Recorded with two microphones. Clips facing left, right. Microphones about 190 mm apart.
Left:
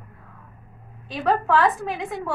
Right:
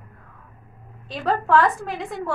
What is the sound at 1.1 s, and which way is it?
A woman's voice, centre (ahead or behind).